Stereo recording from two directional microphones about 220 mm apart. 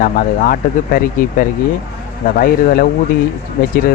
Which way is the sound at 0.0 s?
40° left (ahead or behind).